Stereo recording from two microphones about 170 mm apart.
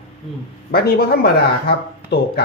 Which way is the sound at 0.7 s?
65° left (ahead or behind).